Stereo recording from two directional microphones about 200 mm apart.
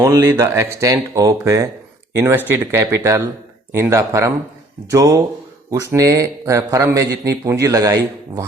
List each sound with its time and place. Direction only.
0.0 s speech: 10° right (ahead or behind)